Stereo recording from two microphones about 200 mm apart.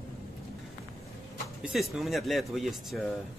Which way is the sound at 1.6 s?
Centre (ahead or behind).